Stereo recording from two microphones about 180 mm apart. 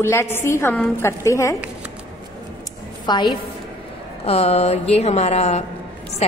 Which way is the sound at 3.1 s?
25° left (ahead or behind).